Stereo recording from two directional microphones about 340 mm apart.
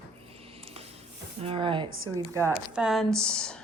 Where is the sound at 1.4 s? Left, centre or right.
Centre.